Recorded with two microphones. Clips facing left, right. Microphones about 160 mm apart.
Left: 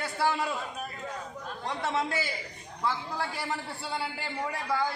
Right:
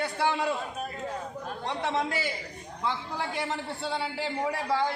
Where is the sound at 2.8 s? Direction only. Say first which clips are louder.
Even; 20° right (ahead or behind).